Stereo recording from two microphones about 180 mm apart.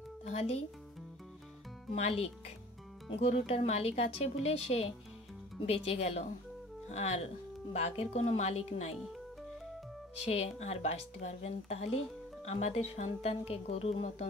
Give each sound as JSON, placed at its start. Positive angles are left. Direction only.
{"t": 0.2, "sound": "music", "side_deg": 40}
{"t": 2.0, "sound": "speech", "side_deg": 35}
{"t": 10.2, "sound": "speech", "side_deg": 35}